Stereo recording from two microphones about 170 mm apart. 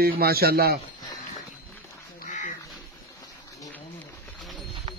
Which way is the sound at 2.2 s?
45° left (ahead or behind).